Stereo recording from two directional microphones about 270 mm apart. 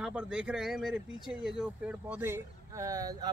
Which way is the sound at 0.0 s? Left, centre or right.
Centre.